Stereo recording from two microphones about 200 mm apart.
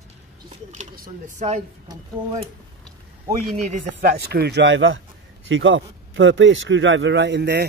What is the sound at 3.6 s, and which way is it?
A man's voice, 40° right (ahead or behind).